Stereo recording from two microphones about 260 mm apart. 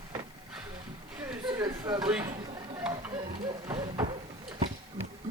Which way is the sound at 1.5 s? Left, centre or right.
Centre.